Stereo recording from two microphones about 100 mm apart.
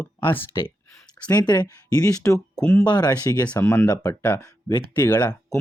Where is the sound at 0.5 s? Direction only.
35° left (ahead or behind).